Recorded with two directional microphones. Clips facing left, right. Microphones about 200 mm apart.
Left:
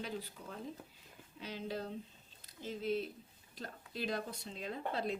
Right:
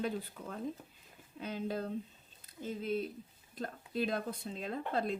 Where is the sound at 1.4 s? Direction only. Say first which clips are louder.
Right 4 dB; 50° right (ahead or behind).